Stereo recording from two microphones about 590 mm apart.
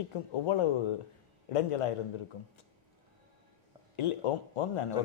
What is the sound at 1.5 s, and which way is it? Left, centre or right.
Speech, left.